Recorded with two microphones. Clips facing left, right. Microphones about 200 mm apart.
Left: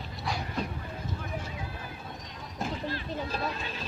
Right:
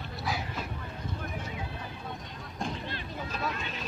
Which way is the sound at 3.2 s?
35° left (ahead or behind).